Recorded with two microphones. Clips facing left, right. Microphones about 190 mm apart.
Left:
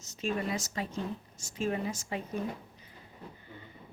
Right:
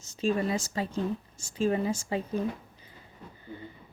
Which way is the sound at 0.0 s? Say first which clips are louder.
Right 5 dB; 30° right (ahead or behind).